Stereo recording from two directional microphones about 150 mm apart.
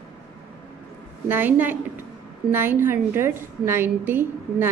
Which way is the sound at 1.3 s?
15° right (ahead or behind).